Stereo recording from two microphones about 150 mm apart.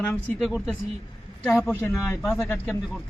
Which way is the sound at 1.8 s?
15° left (ahead or behind).